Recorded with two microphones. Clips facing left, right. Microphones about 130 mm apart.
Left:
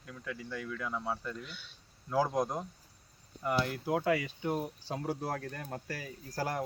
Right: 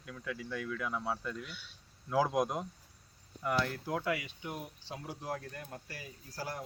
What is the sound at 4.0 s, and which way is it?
Speech, 35° left (ahead or behind).